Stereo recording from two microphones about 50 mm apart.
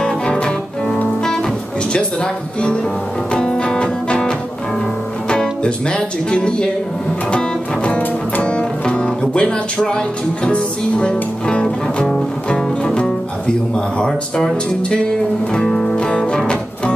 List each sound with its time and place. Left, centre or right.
0.0 s music: centre
3.3 s music: centre
5.3 s speech: centre
7.2 s music: left